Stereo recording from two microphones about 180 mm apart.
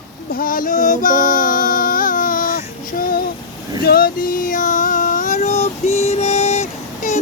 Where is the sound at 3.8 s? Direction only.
55° left (ahead or behind).